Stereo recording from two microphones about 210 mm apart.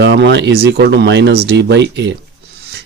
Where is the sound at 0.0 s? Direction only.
55° right (ahead or behind).